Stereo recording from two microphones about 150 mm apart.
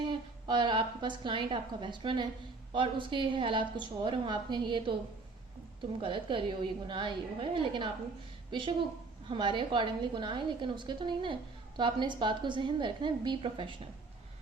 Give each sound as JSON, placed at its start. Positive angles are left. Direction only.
{"t": 0.0, "sound": "a woman's voice", "side_deg": -30}
{"t": 6.0, "sound": "a woman's voice", "side_deg": -35}